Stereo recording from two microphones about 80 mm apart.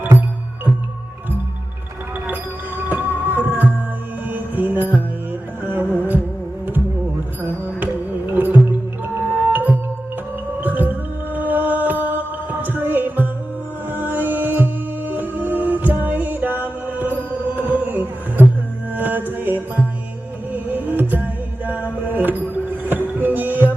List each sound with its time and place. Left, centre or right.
2.2 s music: right
8.3 s music: right